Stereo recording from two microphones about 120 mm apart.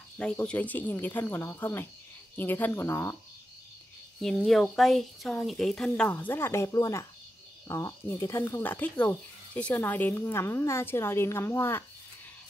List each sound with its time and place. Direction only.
0.2 s speech: 10° left (ahead or behind)
4.2 s speech: 5° left (ahead or behind); by 11.8 s 20° left (ahead or behind)